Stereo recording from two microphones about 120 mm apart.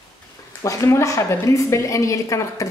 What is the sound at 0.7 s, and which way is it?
A woman's voice, 25° left (ahead or behind).